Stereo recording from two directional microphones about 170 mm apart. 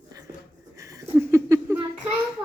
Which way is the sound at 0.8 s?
20° right (ahead or behind).